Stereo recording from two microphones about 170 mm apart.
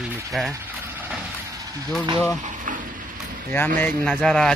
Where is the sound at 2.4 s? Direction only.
50° right (ahead or behind).